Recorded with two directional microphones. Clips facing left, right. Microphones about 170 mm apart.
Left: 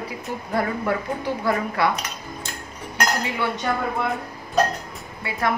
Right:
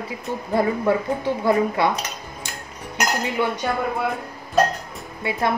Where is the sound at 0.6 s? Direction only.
25° right (ahead or behind).